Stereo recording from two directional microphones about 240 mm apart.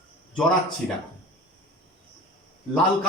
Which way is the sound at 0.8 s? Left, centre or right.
Centre.